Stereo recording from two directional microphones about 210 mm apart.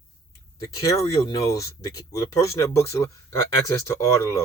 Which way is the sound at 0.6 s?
15° left (ahead or behind).